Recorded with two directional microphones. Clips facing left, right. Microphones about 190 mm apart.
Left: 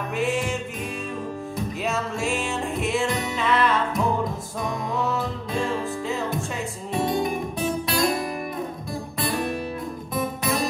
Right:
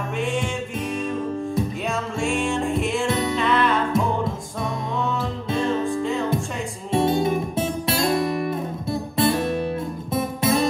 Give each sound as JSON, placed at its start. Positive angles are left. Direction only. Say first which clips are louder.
{"t": 1.5, "sound": "music", "louder": "right 2 dB", "side_deg": 0}
{"t": 6.9, "sound": "music", "louder": "right 4 dB", "side_deg": -25}